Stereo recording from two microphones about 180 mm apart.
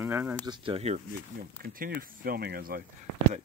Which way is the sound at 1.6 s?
55° right (ahead or behind).